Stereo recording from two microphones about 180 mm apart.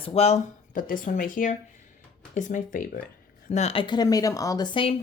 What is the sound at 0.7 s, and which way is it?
Speech, 50° left (ahead or behind).